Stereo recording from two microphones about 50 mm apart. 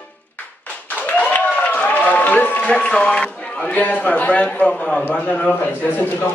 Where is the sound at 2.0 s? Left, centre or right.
Left.